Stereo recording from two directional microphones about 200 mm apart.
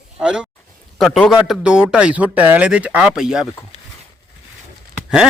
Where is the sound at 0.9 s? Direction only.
Centre (ahead or behind).